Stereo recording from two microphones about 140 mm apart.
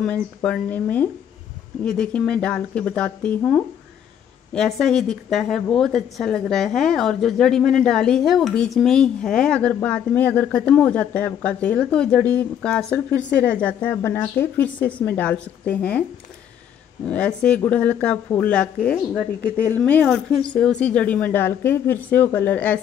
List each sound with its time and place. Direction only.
0.0 s a woman's voice: 5° left (ahead or behind)
17.0 s speech: 10° left (ahead or behind)